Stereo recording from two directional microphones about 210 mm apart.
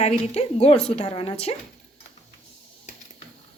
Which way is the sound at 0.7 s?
5° left (ahead or behind).